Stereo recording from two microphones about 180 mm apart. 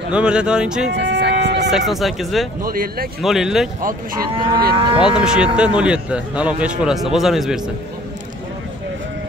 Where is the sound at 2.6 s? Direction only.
55° right (ahead or behind).